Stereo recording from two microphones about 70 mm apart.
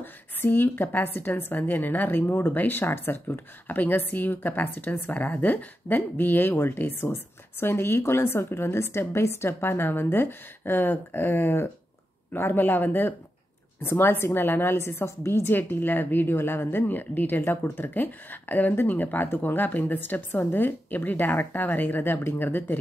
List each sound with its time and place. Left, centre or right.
0.0 s a woman's voice: left
15.5 s a woman's voice: left